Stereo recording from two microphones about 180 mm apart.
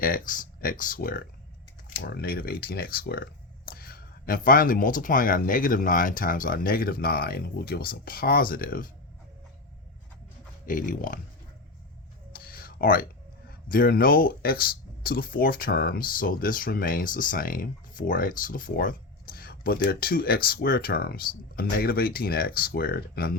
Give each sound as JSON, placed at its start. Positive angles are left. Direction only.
{"t": 0.0, "sound": "speech", "side_deg": 50}
{"t": 10.7, "sound": "speech", "side_deg": 50}
{"t": 12.3, "sound": "a sound", "side_deg": 55}
{"t": 13.7, "sound": "speech", "side_deg": 55}